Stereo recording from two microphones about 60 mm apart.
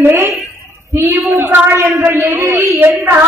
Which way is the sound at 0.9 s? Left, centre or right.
Right.